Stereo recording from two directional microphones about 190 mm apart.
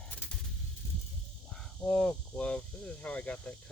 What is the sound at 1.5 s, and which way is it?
Speech, 5° left (ahead or behind).